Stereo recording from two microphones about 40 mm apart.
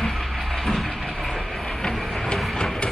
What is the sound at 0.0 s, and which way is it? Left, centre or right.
Train, centre.